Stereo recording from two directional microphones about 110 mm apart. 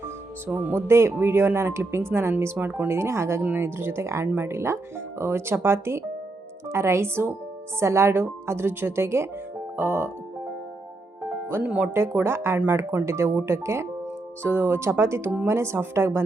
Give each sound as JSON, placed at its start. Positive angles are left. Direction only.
{"t": 0.4, "sound": "speech", "side_deg": -15}
{"t": 11.3, "sound": "speech", "side_deg": -10}
{"t": 11.9, "sound": "speech", "side_deg": -20}